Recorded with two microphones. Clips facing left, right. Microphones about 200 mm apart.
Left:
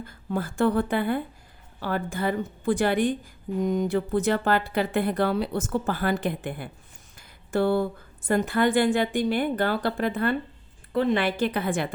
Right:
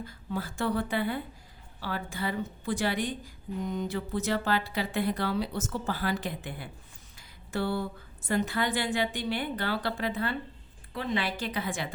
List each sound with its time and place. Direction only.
0.0 s a woman's voice: 50° left (ahead or behind)
7.2 s a sound: 50° left (ahead or behind)
8.3 s a woman's voice: 50° left (ahead or behind)